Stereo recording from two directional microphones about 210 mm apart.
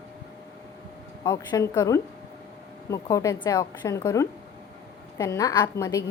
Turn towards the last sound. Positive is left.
turn(degrees=15)  # may be behind; listen again after turning